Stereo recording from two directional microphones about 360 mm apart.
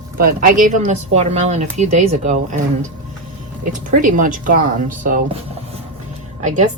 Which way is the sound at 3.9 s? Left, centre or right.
Right.